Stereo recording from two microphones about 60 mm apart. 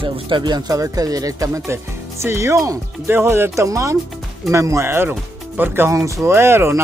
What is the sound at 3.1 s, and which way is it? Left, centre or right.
Speech, right.